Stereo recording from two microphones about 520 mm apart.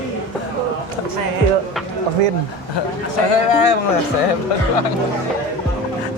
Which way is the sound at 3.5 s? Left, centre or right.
Left.